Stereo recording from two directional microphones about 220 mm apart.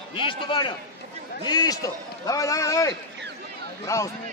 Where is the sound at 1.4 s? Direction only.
20° left (ahead or behind).